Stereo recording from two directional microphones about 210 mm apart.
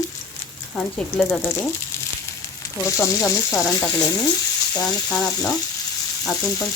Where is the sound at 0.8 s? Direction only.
5° left (ahead or behind).